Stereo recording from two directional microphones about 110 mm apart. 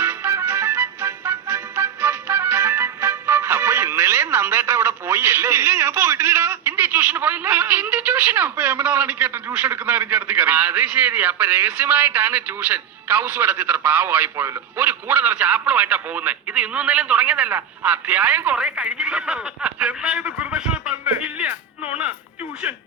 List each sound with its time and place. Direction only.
0.0 s music: 20° right (ahead or behind)